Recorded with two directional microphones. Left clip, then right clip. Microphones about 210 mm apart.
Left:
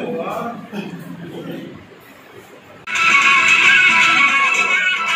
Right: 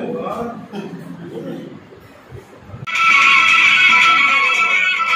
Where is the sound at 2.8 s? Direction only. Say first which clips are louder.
Right 1 dB; 30° right (ahead or behind).